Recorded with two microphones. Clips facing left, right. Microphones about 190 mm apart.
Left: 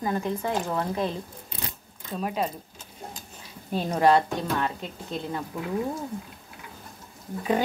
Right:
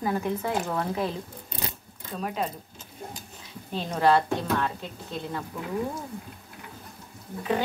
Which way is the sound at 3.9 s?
15° left (ahead or behind).